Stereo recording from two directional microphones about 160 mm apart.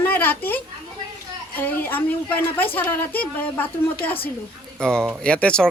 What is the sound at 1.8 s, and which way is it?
Speech, 10° left (ahead or behind).